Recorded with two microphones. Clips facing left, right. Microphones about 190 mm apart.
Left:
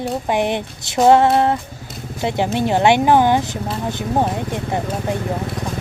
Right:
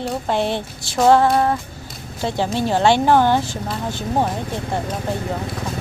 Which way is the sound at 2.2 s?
20° left (ahead or behind).